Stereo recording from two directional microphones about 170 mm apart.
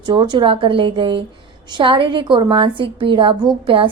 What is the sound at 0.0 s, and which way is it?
A woman's voice, 25° right (ahead or behind).